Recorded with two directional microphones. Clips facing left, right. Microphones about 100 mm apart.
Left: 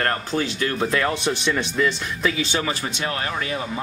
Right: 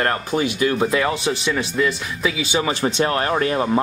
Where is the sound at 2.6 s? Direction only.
30° right (ahead or behind).